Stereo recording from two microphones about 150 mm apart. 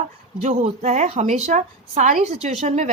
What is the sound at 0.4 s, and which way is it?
A woman's voice, 50° right (ahead or behind).